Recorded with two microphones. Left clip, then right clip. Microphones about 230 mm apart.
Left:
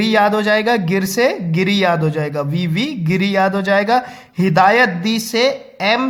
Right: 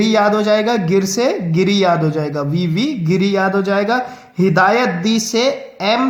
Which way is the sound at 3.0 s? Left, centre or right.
Left.